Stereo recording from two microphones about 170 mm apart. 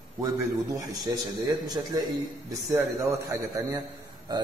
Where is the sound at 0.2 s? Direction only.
20° right (ahead or behind).